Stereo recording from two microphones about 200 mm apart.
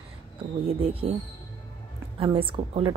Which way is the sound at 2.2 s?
25° right (ahead or behind).